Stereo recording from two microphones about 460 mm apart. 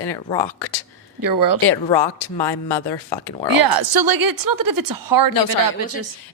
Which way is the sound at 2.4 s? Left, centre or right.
Centre.